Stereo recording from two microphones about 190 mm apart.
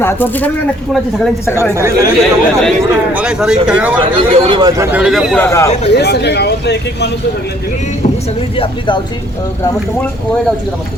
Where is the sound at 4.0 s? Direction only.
25° right (ahead or behind).